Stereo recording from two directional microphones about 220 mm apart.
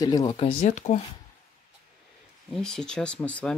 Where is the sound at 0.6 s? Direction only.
35° left (ahead or behind).